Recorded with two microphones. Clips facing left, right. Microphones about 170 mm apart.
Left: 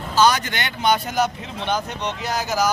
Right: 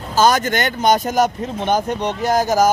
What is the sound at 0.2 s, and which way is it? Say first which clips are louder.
Speech: right 3 dB; 45° right (ahead or behind).